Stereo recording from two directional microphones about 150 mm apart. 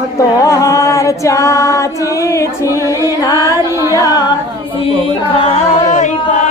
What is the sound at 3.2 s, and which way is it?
Music, 25° left (ahead or behind).